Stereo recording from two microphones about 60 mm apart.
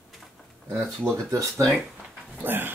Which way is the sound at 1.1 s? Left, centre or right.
Right.